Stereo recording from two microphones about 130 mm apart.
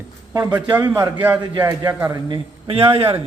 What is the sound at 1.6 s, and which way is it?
A man's voice, 25° right (ahead or behind).